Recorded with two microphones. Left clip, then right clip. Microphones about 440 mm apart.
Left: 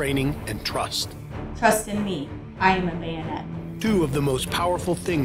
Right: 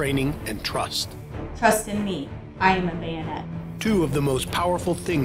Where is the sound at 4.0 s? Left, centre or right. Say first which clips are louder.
Even; right.